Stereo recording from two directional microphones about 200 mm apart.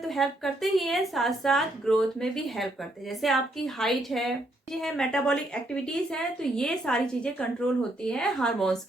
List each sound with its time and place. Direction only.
0.0 s a woman's voice: centre (ahead or behind)